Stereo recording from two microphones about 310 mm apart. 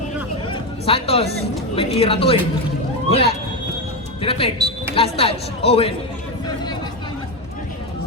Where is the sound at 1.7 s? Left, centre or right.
Centre.